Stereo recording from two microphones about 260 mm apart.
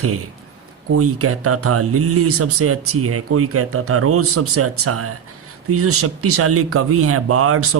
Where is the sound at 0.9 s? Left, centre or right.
Right.